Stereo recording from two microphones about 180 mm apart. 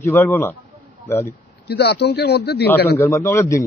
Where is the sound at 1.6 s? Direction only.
65° left (ahead or behind).